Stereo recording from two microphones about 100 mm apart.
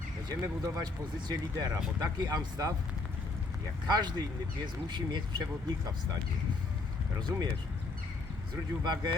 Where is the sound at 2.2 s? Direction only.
40° right (ahead or behind).